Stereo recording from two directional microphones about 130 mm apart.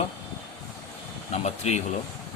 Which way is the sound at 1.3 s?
60° left (ahead or behind).